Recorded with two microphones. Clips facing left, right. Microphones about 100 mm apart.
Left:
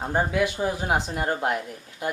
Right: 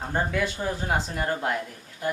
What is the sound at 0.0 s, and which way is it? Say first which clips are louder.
Speech: left 3 dB; 15° left (ahead or behind).